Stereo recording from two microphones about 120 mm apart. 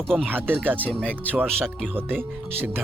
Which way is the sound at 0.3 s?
15° right (ahead or behind).